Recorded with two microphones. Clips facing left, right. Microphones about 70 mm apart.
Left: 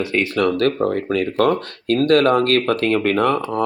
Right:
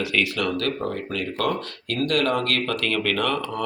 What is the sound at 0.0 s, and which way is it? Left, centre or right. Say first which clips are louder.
Speech: left 6 dB; left.